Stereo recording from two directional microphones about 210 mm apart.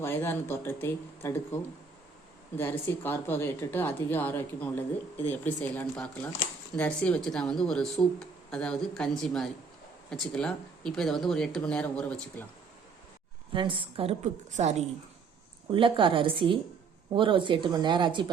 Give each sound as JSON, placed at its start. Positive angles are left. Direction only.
{"t": 0.0, "sound": "a woman's voice", "side_deg": 10}
{"t": 2.6, "sound": "a woman's voice", "side_deg": 10}
{"t": 13.5, "sound": "a woman's voice", "side_deg": -25}